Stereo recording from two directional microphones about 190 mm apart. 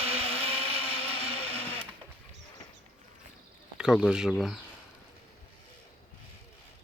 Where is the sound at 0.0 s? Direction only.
30° right (ahead or behind).